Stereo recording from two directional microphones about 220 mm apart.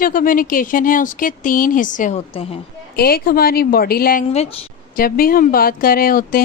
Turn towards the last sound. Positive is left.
turn(degrees=40)  # may be behind; listen again after turning